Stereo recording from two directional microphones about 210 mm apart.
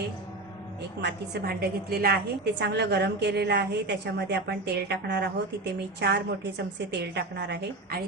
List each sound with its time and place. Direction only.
1.0 s a woman's voice: 50° right (ahead or behind)